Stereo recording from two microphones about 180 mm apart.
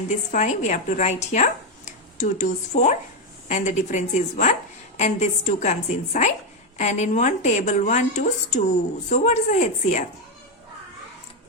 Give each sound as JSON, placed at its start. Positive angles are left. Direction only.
{"t": 0.3, "sound": "a woman's voice", "side_deg": 40}